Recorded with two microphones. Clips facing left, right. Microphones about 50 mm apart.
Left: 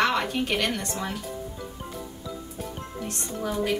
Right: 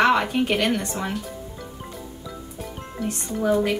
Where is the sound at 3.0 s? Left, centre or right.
Centre.